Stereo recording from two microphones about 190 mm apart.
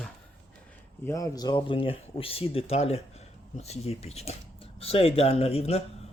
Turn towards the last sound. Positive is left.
turn(degrees=35)  # may be behind; listen again after turning